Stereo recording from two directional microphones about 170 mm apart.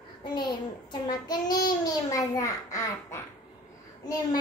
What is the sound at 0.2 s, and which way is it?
Child singing, 25° left (ahead or behind).